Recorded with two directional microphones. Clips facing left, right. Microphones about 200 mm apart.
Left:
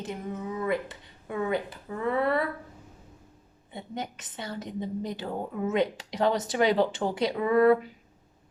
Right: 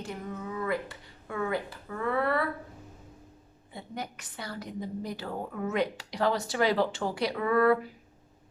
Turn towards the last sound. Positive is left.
turn(degrees=20)  # may be behind; listen again after turning